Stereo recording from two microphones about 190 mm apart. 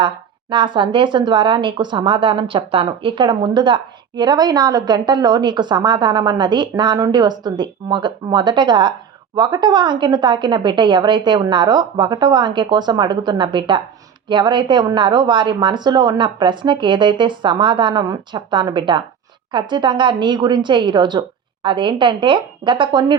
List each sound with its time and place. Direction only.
0.5 s speech: 25° right (ahead or behind)